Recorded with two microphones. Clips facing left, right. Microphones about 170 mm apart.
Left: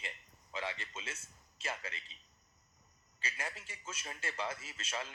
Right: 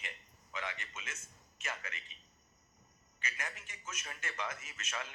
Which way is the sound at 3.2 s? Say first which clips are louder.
Left 1 dB; 30° left (ahead or behind).